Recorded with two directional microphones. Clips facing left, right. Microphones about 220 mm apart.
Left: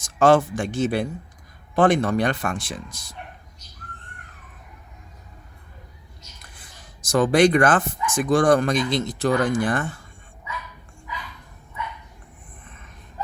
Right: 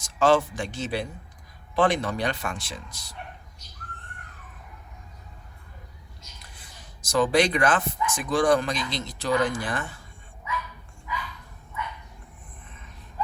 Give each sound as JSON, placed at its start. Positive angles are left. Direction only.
{"t": 0.0, "sound": "speech", "side_deg": 50}
{"t": 6.6, "sound": "speech", "side_deg": 50}